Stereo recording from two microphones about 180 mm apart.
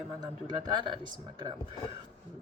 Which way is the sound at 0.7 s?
25° right (ahead or behind).